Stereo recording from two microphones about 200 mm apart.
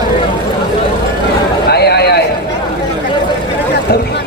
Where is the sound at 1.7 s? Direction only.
55° left (ahead or behind).